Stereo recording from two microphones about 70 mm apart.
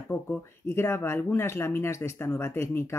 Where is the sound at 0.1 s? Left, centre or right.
Left.